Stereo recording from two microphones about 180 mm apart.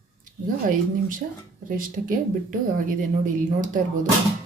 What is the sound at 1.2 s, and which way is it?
Speech, 55° right (ahead or behind).